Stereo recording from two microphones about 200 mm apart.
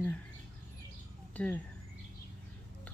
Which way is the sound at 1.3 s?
5° left (ahead or behind).